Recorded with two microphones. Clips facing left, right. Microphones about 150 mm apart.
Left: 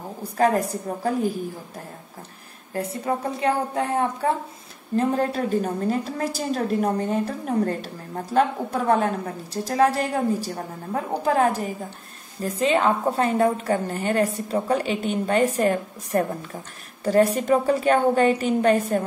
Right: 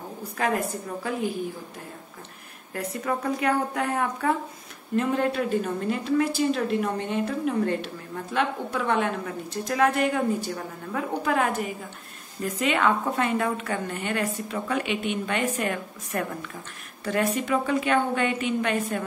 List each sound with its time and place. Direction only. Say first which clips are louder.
0.4 s a woman's voice: left 6 dB; 35° left (ahead or behind)
2.7 s a woman's voice: left 3 dB; 30° left (ahead or behind)